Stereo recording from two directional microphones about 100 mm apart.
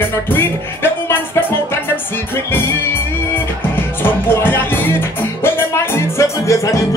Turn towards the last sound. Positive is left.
turn(degrees=30)  # may be behind; listen again after turning